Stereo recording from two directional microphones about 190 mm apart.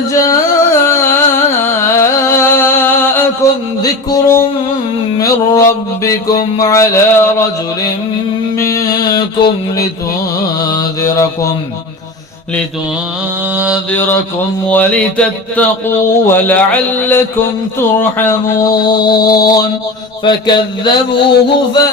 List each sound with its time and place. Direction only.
0.1 s carnatic music: 15° left (ahead or behind)
4.1 s a sound: 15° left (ahead or behind)
6.1 s mantra: 20° left (ahead or behind)
8.5 s music: 15° left (ahead or behind)
10.6 s mantra: 20° left (ahead or behind)
14.7 s mantra: 10° left (ahead or behind)
18.6 s a sound: 20° left (ahead or behind)